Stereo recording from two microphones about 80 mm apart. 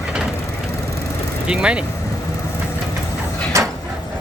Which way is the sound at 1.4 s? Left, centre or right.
Centre.